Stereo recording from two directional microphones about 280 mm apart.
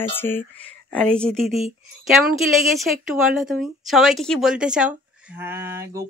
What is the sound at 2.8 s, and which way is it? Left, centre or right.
Speech, centre.